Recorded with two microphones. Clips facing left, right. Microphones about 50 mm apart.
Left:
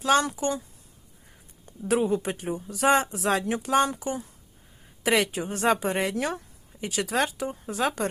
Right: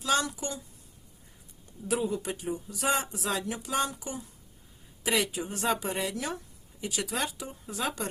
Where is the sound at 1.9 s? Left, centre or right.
Left.